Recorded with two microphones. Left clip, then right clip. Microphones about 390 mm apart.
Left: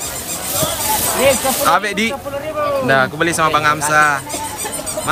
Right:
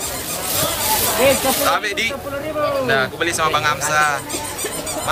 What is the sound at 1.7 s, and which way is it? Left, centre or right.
Speech, centre.